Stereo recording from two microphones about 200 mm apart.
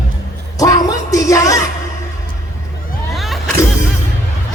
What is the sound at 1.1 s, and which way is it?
Music, 15° left (ahead or behind).